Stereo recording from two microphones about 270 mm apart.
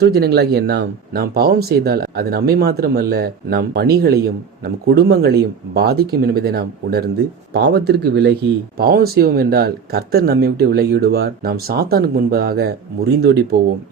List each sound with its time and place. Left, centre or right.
0.0 s speech: right